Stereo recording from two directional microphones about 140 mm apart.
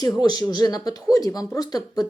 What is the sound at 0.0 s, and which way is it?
Speech, 30° left (ahead or behind).